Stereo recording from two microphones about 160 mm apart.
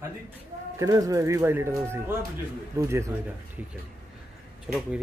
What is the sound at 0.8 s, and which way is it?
Speech, 20° right (ahead or behind).